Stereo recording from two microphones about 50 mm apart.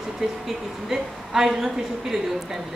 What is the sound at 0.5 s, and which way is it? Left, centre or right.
A woman's voice, centre.